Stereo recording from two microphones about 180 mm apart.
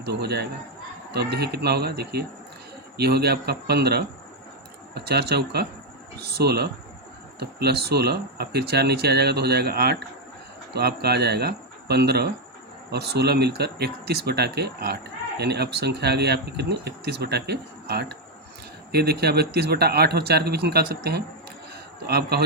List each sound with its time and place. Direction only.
0.0 s speech: 65° right (ahead or behind)